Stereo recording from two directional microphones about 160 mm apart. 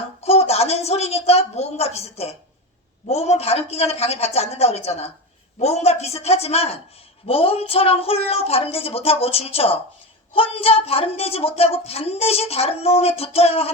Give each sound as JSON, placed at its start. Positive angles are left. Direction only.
{"t": 0.2, "sound": "a woman's voice", "side_deg": 40}